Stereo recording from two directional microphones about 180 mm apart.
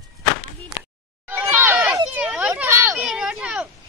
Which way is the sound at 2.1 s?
5° right (ahead or behind).